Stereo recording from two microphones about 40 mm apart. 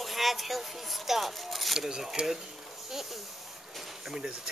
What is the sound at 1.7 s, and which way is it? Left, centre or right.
Speech, centre.